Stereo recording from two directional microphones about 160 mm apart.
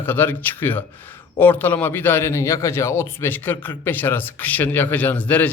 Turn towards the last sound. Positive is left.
turn(degrees=10)  # may be behind; listen again after turning